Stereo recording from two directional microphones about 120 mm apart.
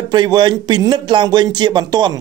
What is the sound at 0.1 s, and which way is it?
Speech, 35° right (ahead or behind).